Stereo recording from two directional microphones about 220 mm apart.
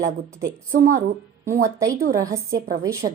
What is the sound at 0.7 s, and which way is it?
Speech, 40° right (ahead or behind).